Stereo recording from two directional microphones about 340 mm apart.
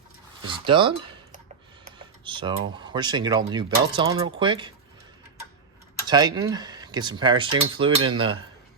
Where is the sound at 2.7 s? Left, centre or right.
Centre.